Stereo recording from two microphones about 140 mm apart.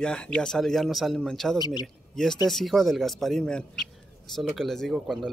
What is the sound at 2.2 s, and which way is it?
Speech, 5° left (ahead or behind).